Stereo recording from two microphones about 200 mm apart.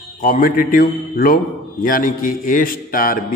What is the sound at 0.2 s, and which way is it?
A man's voice, 45° left (ahead or behind).